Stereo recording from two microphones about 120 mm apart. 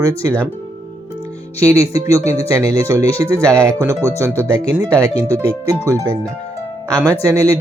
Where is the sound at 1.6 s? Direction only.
25° right (ahead or behind).